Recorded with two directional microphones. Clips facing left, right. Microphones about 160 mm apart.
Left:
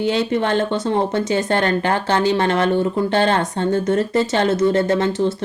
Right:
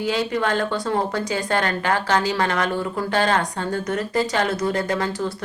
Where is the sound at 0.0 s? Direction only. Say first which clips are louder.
Left 4 dB; 25° left (ahead or behind).